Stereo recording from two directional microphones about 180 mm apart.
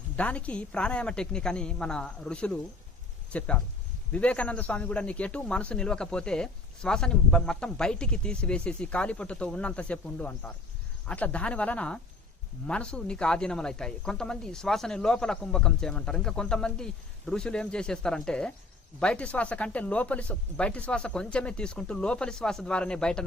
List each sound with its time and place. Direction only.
0.2 s a man's voice: 5° left (ahead or behind)